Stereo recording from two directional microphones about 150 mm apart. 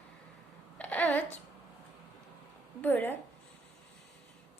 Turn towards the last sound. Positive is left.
turn(degrees=15)  # may be behind; listen again after turning